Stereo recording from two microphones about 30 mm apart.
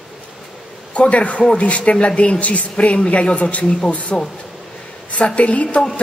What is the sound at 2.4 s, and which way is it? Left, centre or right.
Speech, left.